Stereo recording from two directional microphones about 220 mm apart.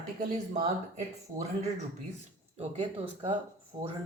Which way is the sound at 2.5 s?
25° right (ahead or behind).